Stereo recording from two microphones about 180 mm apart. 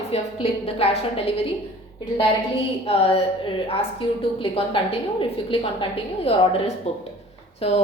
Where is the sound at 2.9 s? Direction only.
30° left (ahead or behind).